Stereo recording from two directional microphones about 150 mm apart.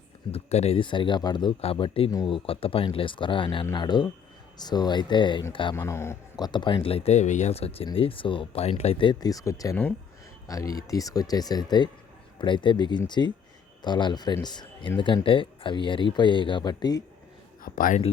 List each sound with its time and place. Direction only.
0.3 s speech: 45° left (ahead or behind)
5.7 s speech: 20° left (ahead or behind)
17.6 s a man's voice: 65° left (ahead or behind)